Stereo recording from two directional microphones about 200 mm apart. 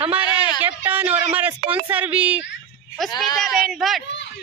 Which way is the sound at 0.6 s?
10° right (ahead or behind).